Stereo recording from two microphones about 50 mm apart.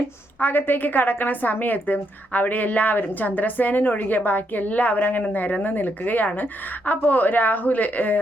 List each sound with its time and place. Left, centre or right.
0.3 s a woman's voice: left